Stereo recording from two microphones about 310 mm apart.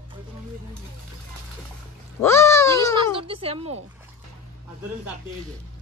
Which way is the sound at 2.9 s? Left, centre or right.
Centre.